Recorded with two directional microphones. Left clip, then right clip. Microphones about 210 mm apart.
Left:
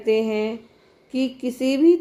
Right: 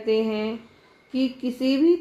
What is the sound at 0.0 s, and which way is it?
Speech, 25° left (ahead or behind).